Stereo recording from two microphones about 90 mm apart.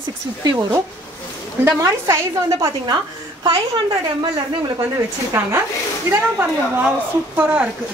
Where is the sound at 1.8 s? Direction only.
35° right (ahead or behind).